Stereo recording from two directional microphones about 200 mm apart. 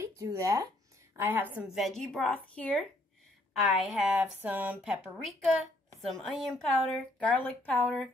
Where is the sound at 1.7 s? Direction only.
Centre (ahead or behind).